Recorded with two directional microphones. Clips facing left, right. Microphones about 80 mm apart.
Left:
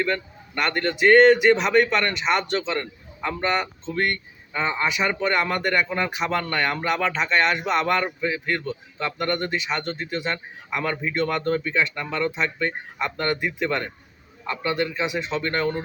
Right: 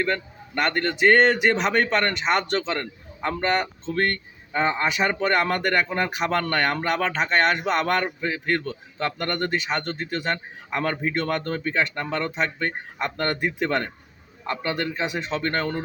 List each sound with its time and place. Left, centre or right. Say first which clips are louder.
0.6 s a man's voice: even; right